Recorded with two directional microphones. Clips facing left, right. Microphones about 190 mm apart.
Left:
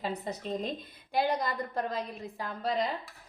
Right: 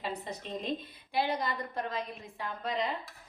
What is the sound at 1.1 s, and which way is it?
A woman's voice, 45° left (ahead or behind).